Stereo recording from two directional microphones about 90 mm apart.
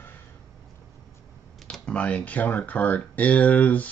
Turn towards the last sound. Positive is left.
turn(degrees=15)  # may be behind; listen again after turning